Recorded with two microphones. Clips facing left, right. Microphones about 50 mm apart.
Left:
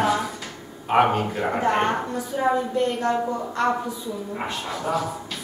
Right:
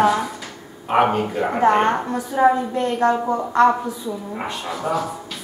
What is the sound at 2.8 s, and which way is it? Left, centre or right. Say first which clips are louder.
Speech: right 4 dB; centre.